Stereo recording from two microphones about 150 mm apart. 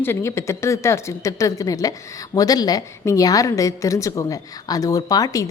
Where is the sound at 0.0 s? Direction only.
15° left (ahead or behind).